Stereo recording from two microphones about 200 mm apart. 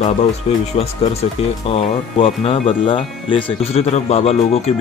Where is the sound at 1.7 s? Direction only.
30° left (ahead or behind).